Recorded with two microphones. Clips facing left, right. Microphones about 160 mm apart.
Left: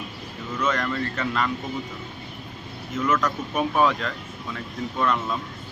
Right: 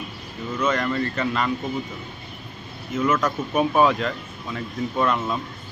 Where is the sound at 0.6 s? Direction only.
5° right (ahead or behind).